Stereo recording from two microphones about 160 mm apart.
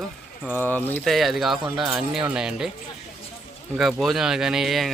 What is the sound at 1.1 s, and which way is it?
Speech, centre (ahead or behind).